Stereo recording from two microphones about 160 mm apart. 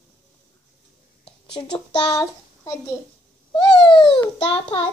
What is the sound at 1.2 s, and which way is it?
A child's voice, 30° left (ahead or behind).